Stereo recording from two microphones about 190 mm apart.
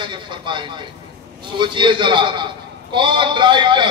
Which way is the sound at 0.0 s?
25° right (ahead or behind).